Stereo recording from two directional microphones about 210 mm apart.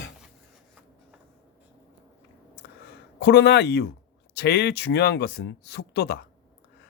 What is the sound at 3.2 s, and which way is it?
Speech, 50° left (ahead or behind).